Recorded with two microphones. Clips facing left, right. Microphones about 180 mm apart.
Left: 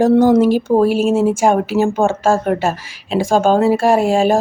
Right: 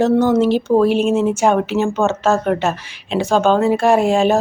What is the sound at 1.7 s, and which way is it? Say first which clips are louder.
Speech: left 2 dB; 40° left (ahead or behind).